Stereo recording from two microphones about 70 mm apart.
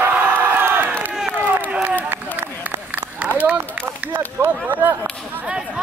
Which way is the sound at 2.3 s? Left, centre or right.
Right.